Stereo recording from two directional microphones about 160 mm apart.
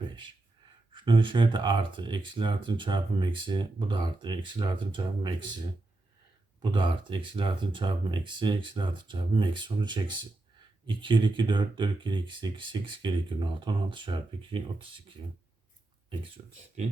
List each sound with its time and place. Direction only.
0.9 s speech: 30° right (ahead or behind)
6.6 s speech: 30° right (ahead or behind)
16.4 s speech: 35° right (ahead or behind)